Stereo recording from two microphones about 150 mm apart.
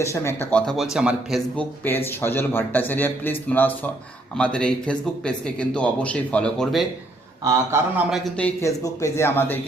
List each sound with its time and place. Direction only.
0.0 s speech: 20° left (ahead or behind)
0.6 s speech: centre (ahead or behind)
1.5 s speech: 15° left (ahead or behind)
7.4 s a man's voice: 20° right (ahead or behind)
8.1 s speech: 5° left (ahead or behind)
8.6 s speech: 20° left (ahead or behind)